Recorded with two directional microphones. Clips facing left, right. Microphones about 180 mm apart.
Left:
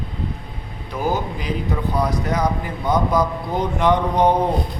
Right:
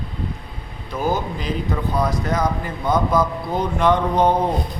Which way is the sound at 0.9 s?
15° left (ahead or behind).